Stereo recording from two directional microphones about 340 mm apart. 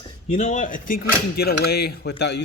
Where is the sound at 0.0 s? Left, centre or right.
Left.